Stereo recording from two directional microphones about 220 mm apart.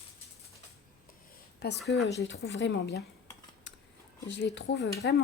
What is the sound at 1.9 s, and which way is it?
Speech, 50° left (ahead or behind).